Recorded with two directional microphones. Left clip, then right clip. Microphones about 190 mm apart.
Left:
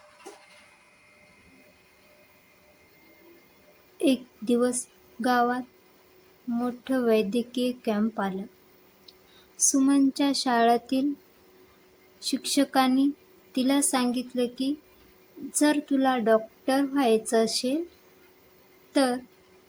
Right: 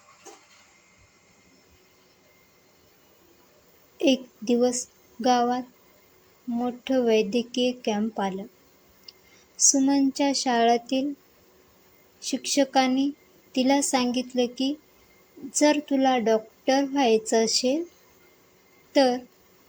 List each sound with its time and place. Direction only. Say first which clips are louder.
4.4 s a woman's voice: right 2 dB; 5° left (ahead or behind)
9.6 s a woman's voice: right 1 dB; 5° left (ahead or behind)
10.8 s speech: right 1 dB; 55° left (ahead or behind)
12.2 s speech: even; 55° left (ahead or behind)
12.5 s a woman's voice: right 1 dB; 10° left (ahead or behind)
18.9 s a woman's voice: right 4 dB; centre (ahead or behind)